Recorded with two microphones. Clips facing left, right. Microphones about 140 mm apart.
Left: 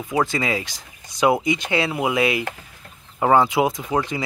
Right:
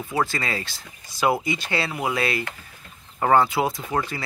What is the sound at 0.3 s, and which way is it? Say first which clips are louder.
Speech: left 5 dB; 15° left (ahead or behind).